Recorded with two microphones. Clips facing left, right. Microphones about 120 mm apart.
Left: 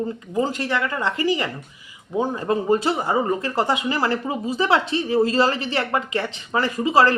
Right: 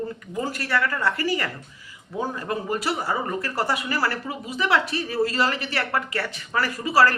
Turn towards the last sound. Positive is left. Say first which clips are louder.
# left 3 dB
turn(degrees=20)  # may be behind; listen again after turning